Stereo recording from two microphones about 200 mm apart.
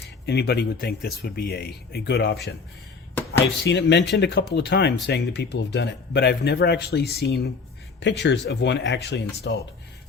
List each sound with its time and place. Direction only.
0.3 s speech: 55° left (ahead or behind)